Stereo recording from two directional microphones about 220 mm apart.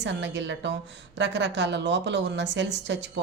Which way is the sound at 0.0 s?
55° right (ahead or behind).